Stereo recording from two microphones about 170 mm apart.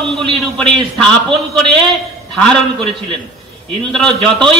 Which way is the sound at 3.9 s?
5° left (ahead or behind).